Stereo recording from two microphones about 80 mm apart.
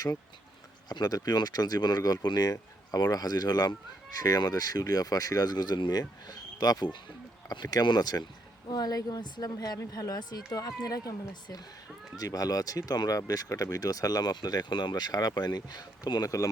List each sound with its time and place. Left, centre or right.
0.9 s speech: left